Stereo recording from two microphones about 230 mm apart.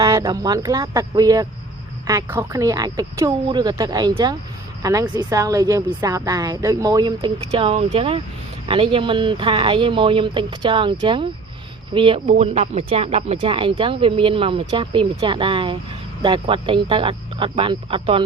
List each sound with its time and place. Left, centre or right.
0.0 s speech: centre